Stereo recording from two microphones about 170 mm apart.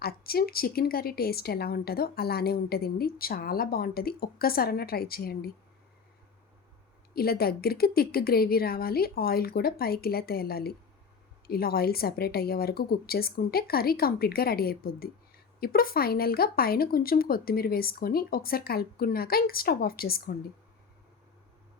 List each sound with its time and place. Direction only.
0.0 s a woman's voice: 65° left (ahead or behind)
7.1 s a woman's voice: 65° left (ahead or behind)